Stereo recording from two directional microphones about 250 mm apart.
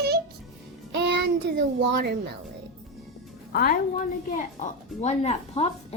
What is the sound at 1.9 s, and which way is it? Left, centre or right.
Speech, right.